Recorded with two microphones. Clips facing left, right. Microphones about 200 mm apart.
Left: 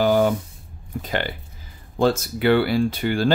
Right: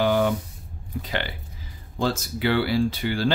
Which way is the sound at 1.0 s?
45° left (ahead or behind).